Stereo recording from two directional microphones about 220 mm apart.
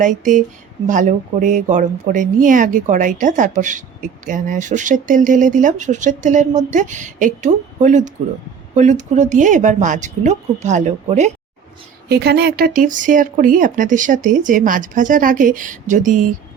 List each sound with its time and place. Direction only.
0.0 s speech: 35° right (ahead or behind)
12.0 s speech: 45° right (ahead or behind)